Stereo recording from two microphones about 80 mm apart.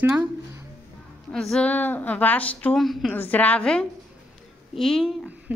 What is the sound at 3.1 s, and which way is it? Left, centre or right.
A woman's voice, centre.